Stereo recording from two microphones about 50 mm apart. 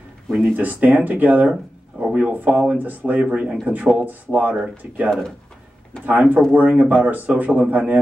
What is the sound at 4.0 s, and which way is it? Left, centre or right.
Speech, right.